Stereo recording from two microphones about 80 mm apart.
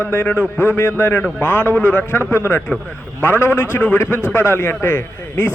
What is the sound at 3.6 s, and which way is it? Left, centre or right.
Speech, left.